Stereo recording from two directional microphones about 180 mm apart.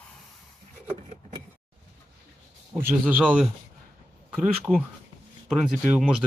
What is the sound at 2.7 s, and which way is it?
Speech, 10° right (ahead or behind).